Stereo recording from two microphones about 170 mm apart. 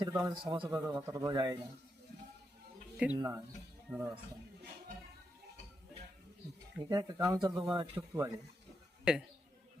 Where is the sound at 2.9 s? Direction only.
5° right (ahead or behind).